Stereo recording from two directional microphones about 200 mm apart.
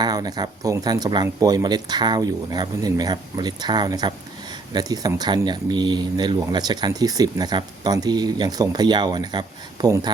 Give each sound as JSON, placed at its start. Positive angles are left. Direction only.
{"t": 0.0, "sound": "speech", "side_deg": -20}